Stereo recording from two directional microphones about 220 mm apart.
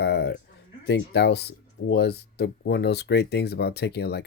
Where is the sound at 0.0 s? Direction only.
50° left (ahead or behind).